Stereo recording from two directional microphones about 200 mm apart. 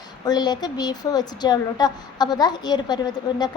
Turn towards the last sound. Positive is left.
turn(degrees=20)  # may be behind; listen again after turning